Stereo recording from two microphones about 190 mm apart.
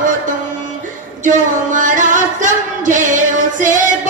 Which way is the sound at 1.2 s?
45° right (ahead or behind).